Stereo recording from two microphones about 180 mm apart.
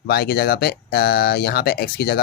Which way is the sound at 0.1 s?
60° left (ahead or behind).